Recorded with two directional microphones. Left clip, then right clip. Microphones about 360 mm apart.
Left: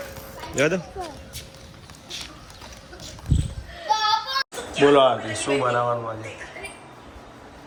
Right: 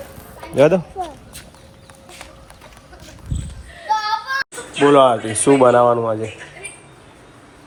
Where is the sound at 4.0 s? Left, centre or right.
Centre.